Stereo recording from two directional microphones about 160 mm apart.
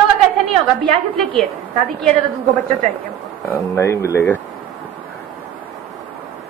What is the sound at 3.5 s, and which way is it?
Speech, 15° left (ahead or behind).